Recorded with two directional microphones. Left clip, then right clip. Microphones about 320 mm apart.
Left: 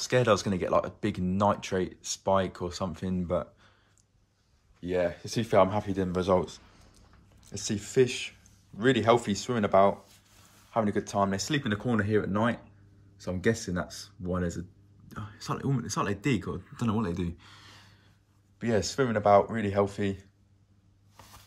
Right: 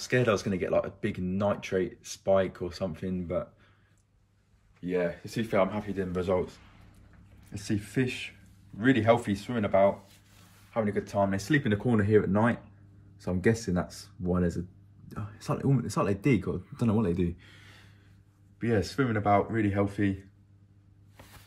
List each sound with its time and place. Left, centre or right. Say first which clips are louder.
0.0 s speech: left 2 dB; centre
4.8 s speech: left 1 dB; centre
15.7 s speech: right 2 dB; centre
18.6 s speech: left 1 dB; centre